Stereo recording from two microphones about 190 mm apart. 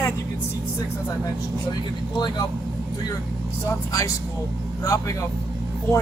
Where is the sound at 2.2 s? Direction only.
20° left (ahead or behind).